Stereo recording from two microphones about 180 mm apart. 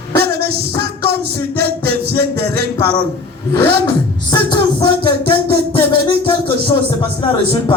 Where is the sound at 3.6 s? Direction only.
65° right (ahead or behind).